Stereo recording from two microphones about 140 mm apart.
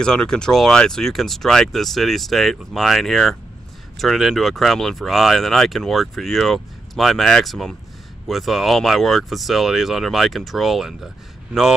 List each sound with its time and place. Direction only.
0.0 s speech: 5° left (ahead or behind)